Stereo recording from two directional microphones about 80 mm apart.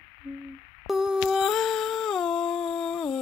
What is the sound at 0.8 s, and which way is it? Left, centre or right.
Humming, centre.